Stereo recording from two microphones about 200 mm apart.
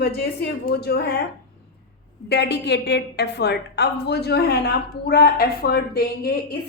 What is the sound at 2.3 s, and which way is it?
A woman's voice, 55° left (ahead or behind).